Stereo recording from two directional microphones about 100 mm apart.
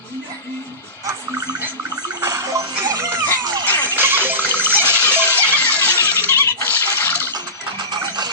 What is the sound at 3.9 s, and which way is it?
Music, 20° right (ahead or behind).